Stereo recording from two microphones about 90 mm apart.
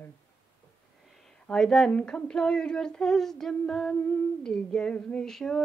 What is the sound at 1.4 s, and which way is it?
Female singing, 5° left (ahead or behind).